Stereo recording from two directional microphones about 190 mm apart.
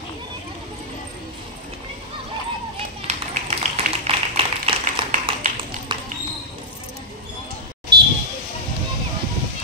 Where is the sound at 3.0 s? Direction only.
35° right (ahead or behind).